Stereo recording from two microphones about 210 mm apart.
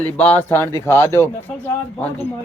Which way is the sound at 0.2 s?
10° left (ahead or behind).